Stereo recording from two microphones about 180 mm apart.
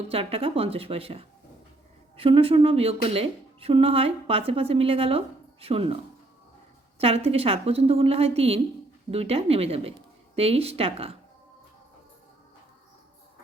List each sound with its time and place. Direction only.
0.1 s a woman's voice: 35° right (ahead or behind)
7.0 s a woman's voice: 35° right (ahead or behind)